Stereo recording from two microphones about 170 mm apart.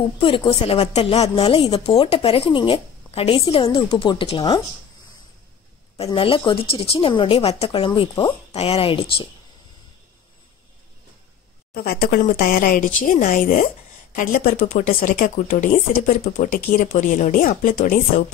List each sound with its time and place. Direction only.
0.2 s a woman's voice: 30° left (ahead or behind)
6.1 s a woman's voice: 30° left (ahead or behind)
11.7 s speech: 65° left (ahead or behind)